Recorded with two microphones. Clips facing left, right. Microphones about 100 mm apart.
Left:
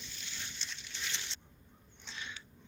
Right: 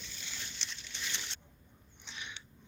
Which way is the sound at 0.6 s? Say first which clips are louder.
Even; 75° right (ahead or behind).